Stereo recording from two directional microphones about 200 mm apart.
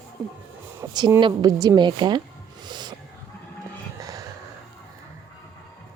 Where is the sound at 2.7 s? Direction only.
20° right (ahead or behind).